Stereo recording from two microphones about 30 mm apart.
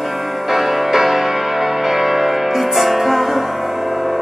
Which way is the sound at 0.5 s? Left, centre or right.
Centre.